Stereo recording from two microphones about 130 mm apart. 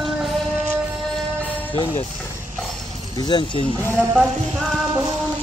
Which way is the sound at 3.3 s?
35° left (ahead or behind).